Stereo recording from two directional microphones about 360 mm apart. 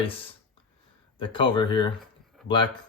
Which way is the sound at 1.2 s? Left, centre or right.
Centre.